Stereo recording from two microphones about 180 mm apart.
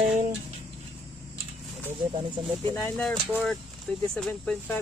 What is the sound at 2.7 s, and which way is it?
Speech, 10° left (ahead or behind).